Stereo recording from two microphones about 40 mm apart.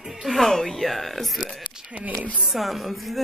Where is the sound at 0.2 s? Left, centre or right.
Centre.